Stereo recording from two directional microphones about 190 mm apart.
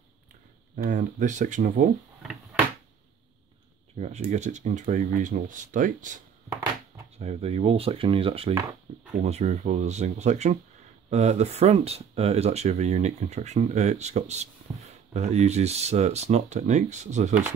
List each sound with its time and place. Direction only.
0.8 s speech: 40° right (ahead or behind)
3.9 s speech: 35° right (ahead or behind)
8.9 s drawer open or close: 35° right (ahead or behind)
9.2 s speech: 35° right (ahead or behind)